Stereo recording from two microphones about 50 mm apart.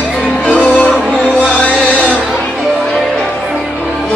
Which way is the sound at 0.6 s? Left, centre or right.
Left.